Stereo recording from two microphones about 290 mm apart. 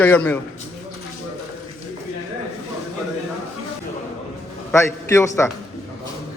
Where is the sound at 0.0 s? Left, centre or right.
Centre.